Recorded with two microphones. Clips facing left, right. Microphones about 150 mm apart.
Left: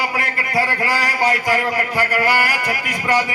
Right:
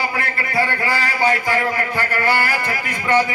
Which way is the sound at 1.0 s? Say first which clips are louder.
Right 2 dB; 40° left (ahead or behind).